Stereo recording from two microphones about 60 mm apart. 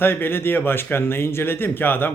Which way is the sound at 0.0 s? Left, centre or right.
Left.